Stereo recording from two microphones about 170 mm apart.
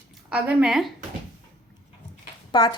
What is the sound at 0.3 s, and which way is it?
Speech, 5° right (ahead or behind).